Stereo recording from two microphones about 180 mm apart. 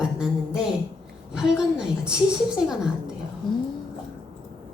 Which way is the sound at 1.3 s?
5° right (ahead or behind).